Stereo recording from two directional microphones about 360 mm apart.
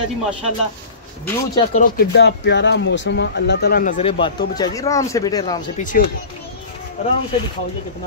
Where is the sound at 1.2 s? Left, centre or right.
Centre.